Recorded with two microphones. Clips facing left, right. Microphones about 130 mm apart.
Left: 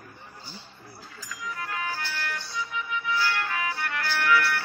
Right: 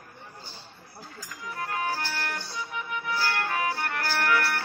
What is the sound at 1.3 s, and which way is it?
Music, 50° right (ahead or behind).